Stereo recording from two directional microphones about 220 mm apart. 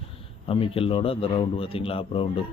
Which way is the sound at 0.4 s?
25° left (ahead or behind).